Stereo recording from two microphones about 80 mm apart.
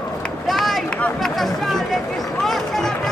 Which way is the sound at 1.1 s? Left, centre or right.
Centre.